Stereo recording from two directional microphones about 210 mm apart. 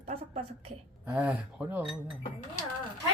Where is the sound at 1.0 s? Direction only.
5° right (ahead or behind).